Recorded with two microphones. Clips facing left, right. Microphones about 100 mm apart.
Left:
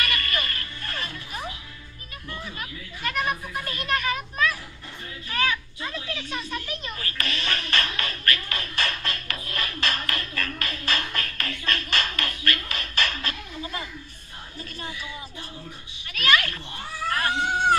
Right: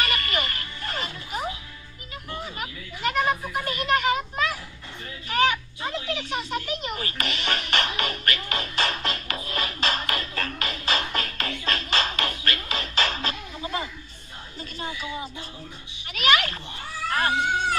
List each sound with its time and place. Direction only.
0.0 s music: 20° right (ahead or behind)
2.3 s children playing: 20° right (ahead or behind)
5.3 s a sound: 20° right (ahead or behind)